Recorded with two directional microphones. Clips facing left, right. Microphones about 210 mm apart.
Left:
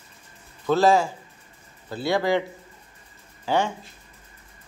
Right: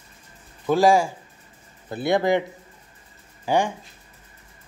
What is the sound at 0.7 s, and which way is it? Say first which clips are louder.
Speech: right 1 dB; 10° right (ahead or behind).